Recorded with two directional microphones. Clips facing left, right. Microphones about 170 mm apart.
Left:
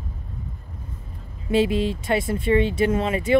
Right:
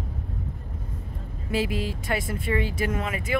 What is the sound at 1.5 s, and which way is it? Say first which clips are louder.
Speech: left 7 dB; 25° left (ahead or behind).